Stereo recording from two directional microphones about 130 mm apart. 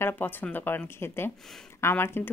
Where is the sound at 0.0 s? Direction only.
15° left (ahead or behind).